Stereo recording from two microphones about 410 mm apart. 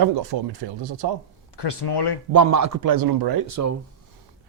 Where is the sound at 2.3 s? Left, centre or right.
Right.